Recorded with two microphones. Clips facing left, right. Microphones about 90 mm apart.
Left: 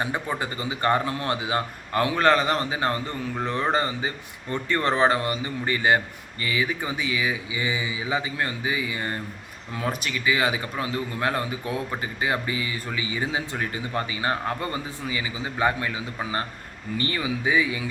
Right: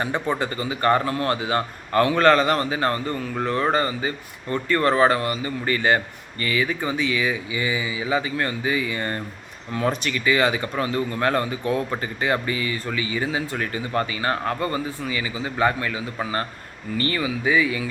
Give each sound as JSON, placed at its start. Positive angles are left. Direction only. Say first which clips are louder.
{"t": 0.3, "sound": "a man's voice", "louder": "right 3 dB", "side_deg": 15}